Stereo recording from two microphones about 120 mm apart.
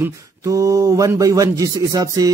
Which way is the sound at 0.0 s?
25° right (ahead or behind).